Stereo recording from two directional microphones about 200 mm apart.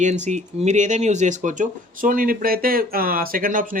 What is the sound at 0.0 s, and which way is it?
Speech, 35° right (ahead or behind).